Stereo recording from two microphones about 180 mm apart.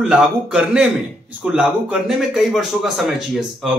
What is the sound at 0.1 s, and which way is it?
Speech, 5° right (ahead or behind).